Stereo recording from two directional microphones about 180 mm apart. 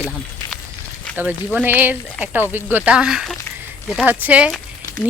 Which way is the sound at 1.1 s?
5° right (ahead or behind).